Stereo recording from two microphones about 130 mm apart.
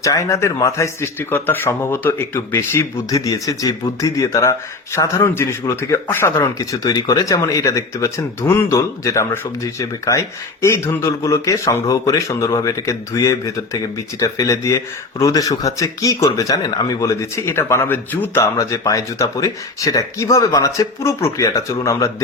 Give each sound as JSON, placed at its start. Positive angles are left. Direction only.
{"t": 0.0, "sound": "speech", "side_deg": 25}
{"t": 6.6, "sound": "speech", "side_deg": 30}
{"t": 18.5, "sound": "speech", "side_deg": 25}